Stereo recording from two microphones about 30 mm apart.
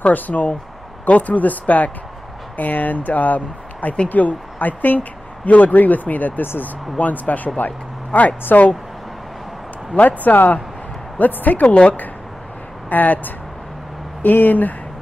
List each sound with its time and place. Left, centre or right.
0.1 s speech: left
9.9 s speech: left
12.9 s speech: left